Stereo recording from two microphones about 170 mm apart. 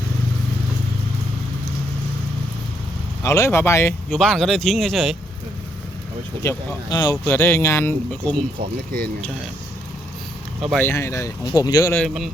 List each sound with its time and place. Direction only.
3.2 s speech: 15° left (ahead or behind)
4.1 s speech: centre (ahead or behind)
6.4 s speech: 15° left (ahead or behind)
10.8 s speech: 15° left (ahead or behind)
11.9 s speech: centre (ahead or behind)